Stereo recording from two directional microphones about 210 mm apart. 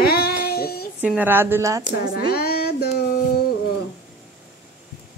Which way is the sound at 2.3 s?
45° left (ahead or behind).